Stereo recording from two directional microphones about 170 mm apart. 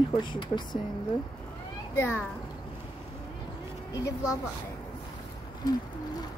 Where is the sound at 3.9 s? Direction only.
20° left (ahead or behind).